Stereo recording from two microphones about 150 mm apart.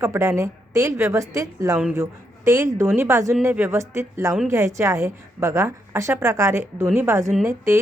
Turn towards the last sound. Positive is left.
turn(degrees=-20)  # may be behind; listen again after turning